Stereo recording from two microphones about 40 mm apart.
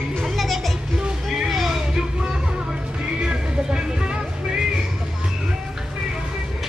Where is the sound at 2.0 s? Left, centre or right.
Right.